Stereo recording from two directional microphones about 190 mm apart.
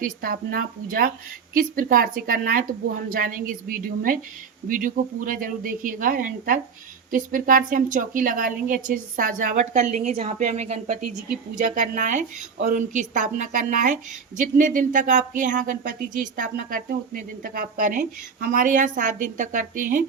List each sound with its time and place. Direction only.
0.0 s a woman's voice: 50° right (ahead or behind)